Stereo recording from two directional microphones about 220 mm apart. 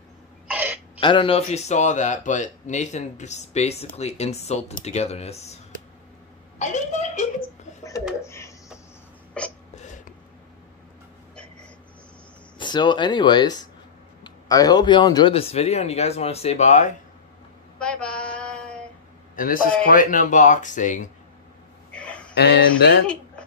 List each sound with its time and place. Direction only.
0.5 s a sound: 10° right (ahead or behind)
1.0 s speech: 25° left (ahead or behind)
6.6 s a woman's voice: 35° left (ahead or behind)
7.8 s a sound: 15° left (ahead or behind)
9.4 s hiccup: 5° left (ahead or behind)
12.5 s speech: 20° left (ahead or behind)
17.7 s mantra: 5° left (ahead or behind)
19.3 s speech: 40° left (ahead or behind)
21.9 s a sound: 5° left (ahead or behind)
22.3 s speech: 50° left (ahead or behind)